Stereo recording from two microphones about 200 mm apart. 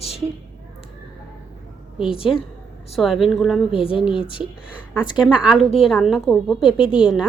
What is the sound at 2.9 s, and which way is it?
Speech, centre (ahead or behind).